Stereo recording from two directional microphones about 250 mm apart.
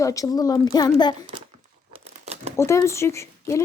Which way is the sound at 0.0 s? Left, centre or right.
Centre.